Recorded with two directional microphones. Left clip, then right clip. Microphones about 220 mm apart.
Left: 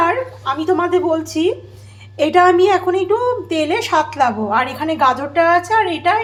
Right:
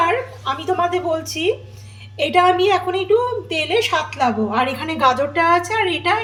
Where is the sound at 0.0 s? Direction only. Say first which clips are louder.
Left 2 dB; 10° left (ahead or behind).